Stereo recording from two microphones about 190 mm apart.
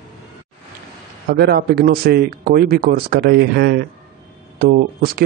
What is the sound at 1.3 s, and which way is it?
Speech, 55° right (ahead or behind).